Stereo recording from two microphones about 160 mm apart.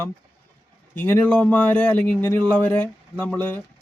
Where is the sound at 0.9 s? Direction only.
10° left (ahead or behind).